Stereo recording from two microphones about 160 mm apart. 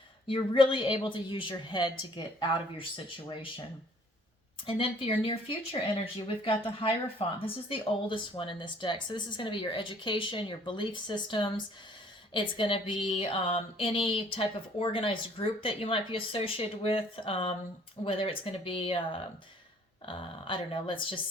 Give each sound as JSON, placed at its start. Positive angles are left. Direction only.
{"t": 0.3, "sound": "a woman's voice", "side_deg": 35}
{"t": 4.6, "sound": "a woman's voice", "side_deg": 35}